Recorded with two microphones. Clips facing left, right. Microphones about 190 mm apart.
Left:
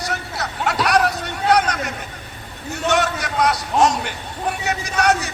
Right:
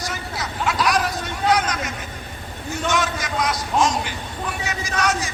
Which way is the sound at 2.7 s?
65° left (ahead or behind).